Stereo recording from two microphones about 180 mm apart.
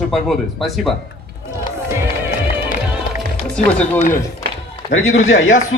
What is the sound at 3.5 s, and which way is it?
Speech, 5° left (ahead or behind).